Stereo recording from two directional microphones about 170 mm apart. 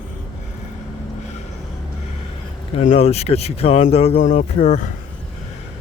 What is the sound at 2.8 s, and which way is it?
Speech, 40° left (ahead or behind).